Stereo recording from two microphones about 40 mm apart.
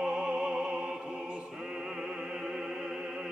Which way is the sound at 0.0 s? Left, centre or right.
Right.